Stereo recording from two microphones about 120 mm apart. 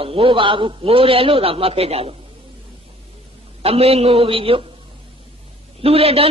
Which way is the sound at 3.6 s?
55° right (ahead or behind).